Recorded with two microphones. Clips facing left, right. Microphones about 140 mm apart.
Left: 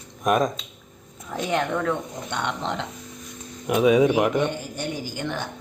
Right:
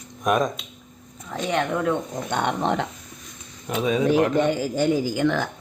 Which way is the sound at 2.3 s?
50° right (ahead or behind).